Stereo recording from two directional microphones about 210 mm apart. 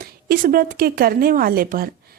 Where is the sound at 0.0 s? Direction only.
45° right (ahead or behind).